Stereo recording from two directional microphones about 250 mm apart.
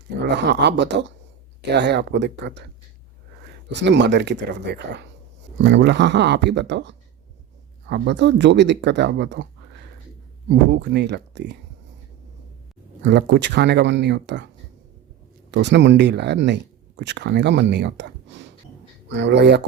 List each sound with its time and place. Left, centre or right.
0.3 s speech: right
3.7 s speech: right
10.5 s speech: right
13.0 s speech: right